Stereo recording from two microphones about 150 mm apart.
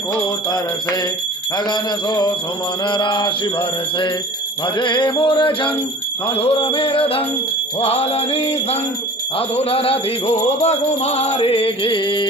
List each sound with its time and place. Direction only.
1.7 s a sound: 30° left (ahead or behind)
2.9 s music: 30° left (ahead or behind)
4.7 s music: 30° left (ahead or behind)